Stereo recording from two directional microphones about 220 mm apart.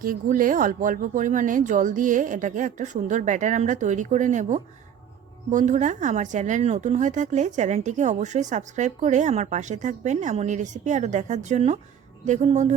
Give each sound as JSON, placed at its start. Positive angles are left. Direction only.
{"t": 0.0, "sound": "a woman's voice", "side_deg": -40}